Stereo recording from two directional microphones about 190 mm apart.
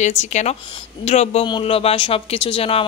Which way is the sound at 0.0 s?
40° left (ahead or behind).